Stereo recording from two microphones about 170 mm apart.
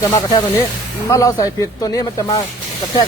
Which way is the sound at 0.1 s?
20° left (ahead or behind).